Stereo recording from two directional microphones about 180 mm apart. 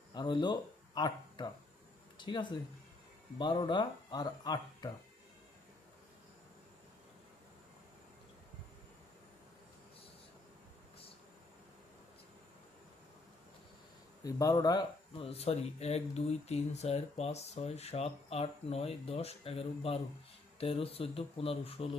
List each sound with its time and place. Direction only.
0.1 s speech: 25° left (ahead or behind)
14.3 s speech: 20° left (ahead or behind)